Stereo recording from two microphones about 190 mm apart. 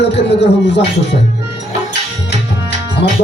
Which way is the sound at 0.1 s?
65° left (ahead or behind).